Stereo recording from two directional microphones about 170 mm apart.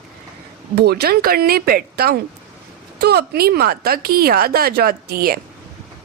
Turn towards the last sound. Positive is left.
turn(degrees=-60)  # may be behind; listen again after turning